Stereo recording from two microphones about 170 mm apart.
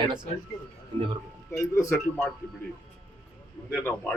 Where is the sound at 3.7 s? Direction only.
10° left (ahead or behind).